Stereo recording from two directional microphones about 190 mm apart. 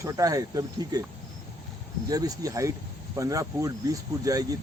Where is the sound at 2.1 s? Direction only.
20° right (ahead or behind).